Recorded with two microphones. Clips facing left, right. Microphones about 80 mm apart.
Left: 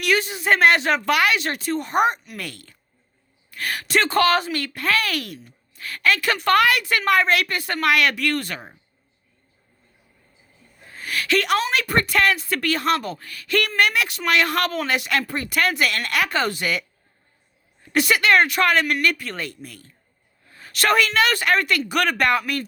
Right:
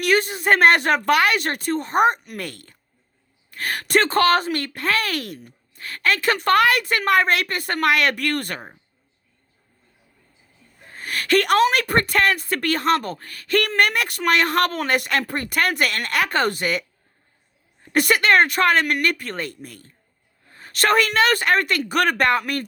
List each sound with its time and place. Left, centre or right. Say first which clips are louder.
0.0 s a woman's voice: right 2 dB; right
5.4 s a sound: right 2 dB; right
5.8 s a woman's voice: even; right
10.8 s a woman's voice: right 1 dB; right
17.8 s speech: right 1 dB; right